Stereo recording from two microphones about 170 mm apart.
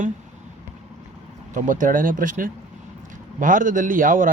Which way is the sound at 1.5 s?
50° right (ahead or behind).